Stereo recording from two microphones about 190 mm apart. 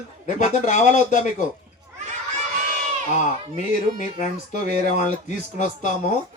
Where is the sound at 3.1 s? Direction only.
40° left (ahead or behind).